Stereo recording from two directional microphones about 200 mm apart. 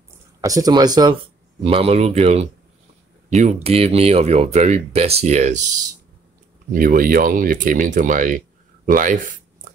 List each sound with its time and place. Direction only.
0.4 s speech: 15° right (ahead or behind); by 9.2 s 40° right (ahead or behind)